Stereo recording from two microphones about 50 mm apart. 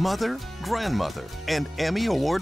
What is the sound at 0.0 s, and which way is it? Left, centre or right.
Speech, centre.